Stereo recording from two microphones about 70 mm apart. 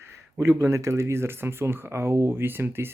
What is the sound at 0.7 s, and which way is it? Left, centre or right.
Speech, right.